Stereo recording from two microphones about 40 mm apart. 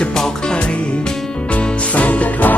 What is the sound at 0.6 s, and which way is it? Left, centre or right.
Music, left.